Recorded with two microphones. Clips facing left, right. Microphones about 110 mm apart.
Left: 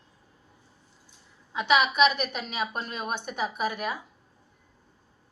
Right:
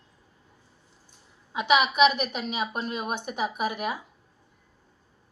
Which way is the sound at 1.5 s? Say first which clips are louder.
Right 1 dB; 5° right (ahead or behind).